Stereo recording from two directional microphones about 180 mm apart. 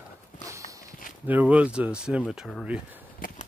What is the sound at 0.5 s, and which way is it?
Walk, 20° right (ahead or behind).